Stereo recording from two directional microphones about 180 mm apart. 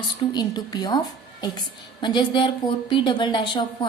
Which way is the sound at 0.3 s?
20° left (ahead or behind).